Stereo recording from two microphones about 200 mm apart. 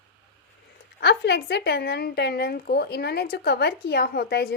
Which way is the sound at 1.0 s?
55° left (ahead or behind).